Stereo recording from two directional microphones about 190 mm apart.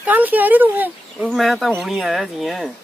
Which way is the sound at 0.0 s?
10° right (ahead or behind).